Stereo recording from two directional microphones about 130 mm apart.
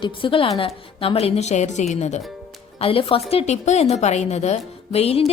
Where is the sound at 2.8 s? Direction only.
45° left (ahead or behind).